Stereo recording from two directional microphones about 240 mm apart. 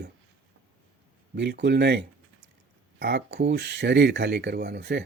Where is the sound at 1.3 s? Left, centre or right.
Right.